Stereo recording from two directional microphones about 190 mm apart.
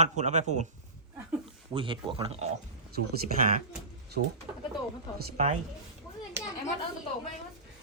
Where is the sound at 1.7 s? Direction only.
25° right (ahead or behind).